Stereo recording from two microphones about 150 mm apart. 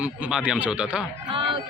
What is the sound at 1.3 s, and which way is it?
Speech, 35° right (ahead or behind).